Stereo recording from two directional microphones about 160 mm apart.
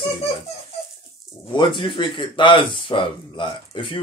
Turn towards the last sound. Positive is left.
turn(degrees=35)  # may be behind; listen again after turning